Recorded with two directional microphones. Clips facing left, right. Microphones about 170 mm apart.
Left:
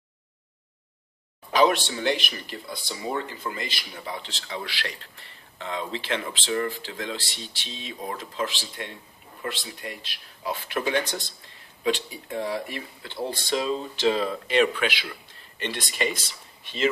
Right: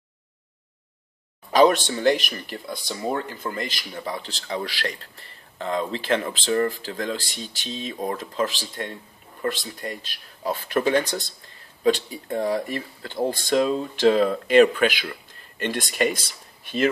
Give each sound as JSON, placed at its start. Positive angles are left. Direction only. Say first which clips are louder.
{"t": 1.5, "sound": "speech", "louder": "right 4 dB", "side_deg": -40}